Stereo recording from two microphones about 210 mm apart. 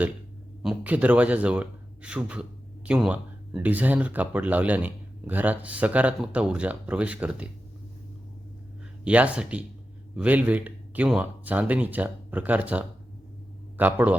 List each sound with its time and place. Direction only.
0.6 s a man's voice: 5° right (ahead or behind)
9.0 s a man's voice: 5° right (ahead or behind)